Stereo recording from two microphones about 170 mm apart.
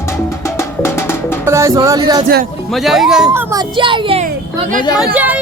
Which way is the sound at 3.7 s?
30° right (ahead or behind).